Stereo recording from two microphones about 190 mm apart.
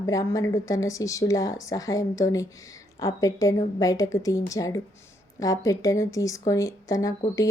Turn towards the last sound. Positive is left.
turn(degrees=20)  # may be behind; listen again after turning